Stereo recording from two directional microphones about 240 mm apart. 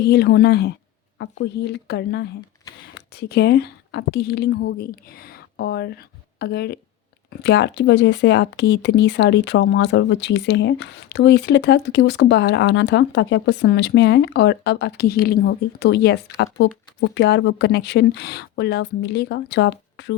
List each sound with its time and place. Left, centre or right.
0.0 s a woman's voice: left